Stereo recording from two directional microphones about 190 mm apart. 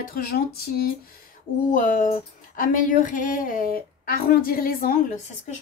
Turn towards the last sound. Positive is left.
turn(degrees=50)  # may be behind; listen again after turning